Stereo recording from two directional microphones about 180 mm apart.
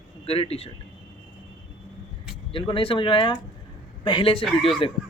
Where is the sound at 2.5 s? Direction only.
30° left (ahead or behind).